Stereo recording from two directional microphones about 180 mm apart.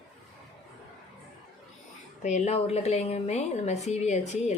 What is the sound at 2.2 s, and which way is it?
A woman's voice, 40° left (ahead or behind).